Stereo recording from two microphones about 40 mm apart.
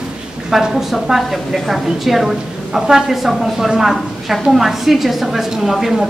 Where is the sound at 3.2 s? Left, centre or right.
Centre.